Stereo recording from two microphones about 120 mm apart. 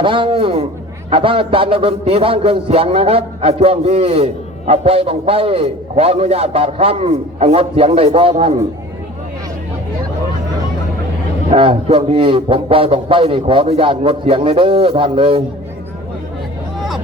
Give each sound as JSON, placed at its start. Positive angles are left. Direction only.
{"t": 0.0, "sound": "a man's voice", "side_deg": -45}
{"t": 11.5, "sound": "a man's voice", "side_deg": -50}